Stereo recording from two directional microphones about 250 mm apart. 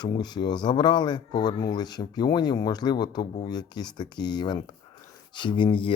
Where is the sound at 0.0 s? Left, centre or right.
Centre.